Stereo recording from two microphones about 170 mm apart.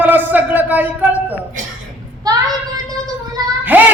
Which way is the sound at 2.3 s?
20° right (ahead or behind).